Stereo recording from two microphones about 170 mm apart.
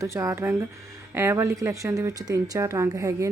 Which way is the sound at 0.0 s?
15° right (ahead or behind).